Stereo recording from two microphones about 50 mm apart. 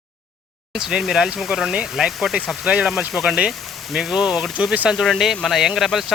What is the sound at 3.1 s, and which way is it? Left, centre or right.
Speech, centre.